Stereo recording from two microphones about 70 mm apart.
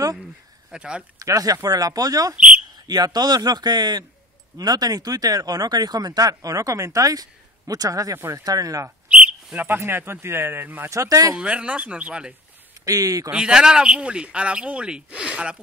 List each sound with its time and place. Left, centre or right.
0.2 s a sound: centre
1.2 s speech: right
2.9 s speech: right
4.6 s speech: right
9.1 s a sound: centre
9.8 s speech: right
10.9 s speech: right
11.3 s speech: centre
12.8 s speech: right
13.3 s speech: centre